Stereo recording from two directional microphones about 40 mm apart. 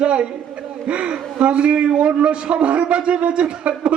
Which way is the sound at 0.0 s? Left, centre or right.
Right.